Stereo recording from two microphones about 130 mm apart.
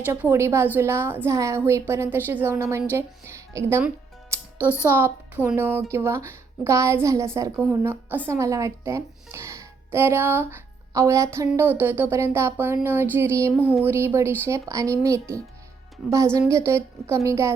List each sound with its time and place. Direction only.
0.0 s speech: 15° right (ahead or behind)
4.3 s music: 20° right (ahead or behind)
4.8 s speech: 15° right (ahead or behind)